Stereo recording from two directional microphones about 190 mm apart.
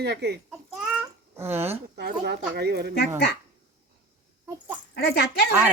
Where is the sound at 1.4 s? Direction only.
10° right (ahead or behind).